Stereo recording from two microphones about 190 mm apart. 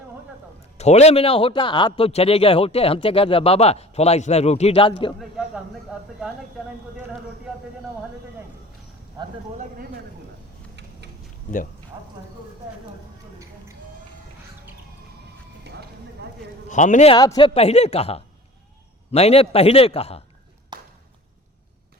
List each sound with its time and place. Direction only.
0.8 s a man's voice: 35° left (ahead or behind)
5.9 s speech: centre (ahead or behind)
9.6 s speech: 50° right (ahead or behind)
11.9 s clip-clop: 25° right (ahead or behind)
15.6 s clip-clop: 60° right (ahead or behind)
16.6 s a man's voice: 40° left (ahead or behind)
17.2 s a man's voice: 20° left (ahead or behind)
20.7 s a sound: 20° right (ahead or behind)